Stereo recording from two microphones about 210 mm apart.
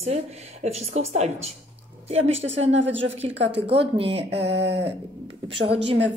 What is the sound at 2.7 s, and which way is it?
Speech, 60° right (ahead or behind).